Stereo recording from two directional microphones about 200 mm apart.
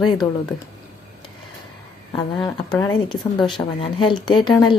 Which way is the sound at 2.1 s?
25° left (ahead or behind).